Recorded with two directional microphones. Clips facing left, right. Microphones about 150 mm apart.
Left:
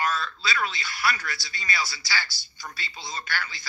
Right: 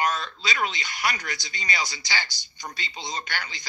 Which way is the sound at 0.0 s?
20° right (ahead or behind).